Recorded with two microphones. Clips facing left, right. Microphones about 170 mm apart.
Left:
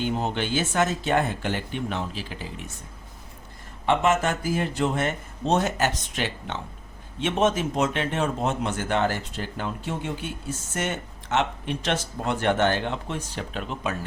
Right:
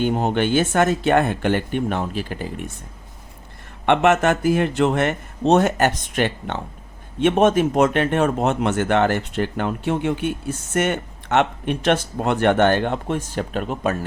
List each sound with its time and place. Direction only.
0.0 s speech: 55° right (ahead or behind)
3.8 s speech: 65° right (ahead or behind); by 13.9 s 50° right (ahead or behind)